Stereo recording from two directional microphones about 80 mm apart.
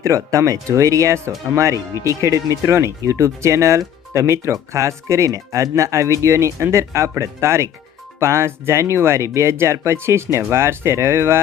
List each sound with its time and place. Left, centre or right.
0.0 s speech: right